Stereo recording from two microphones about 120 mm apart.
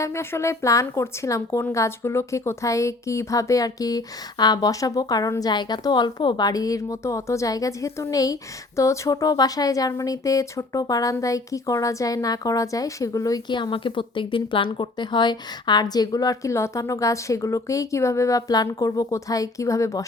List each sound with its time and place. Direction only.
0.0 s a woman's voice: 20° left (ahead or behind)
13.5 s a woman's voice: 40° left (ahead or behind); by 20.1 s 25° left (ahead or behind)